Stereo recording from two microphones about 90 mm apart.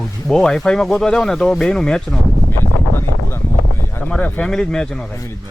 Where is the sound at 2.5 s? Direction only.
25° left (ahead or behind).